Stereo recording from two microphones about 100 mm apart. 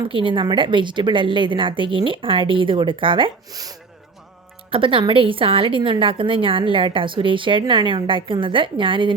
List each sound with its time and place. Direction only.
0.0 s a woman's voice: 60° right (ahead or behind)
3.5 s speech: 40° right (ahead or behind)
4.7 s a woman's voice: 60° right (ahead or behind)